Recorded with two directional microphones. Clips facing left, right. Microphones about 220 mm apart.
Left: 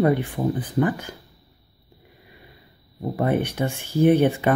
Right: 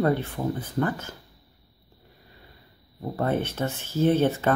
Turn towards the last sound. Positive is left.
turn(degrees=15)  # may be behind; listen again after turning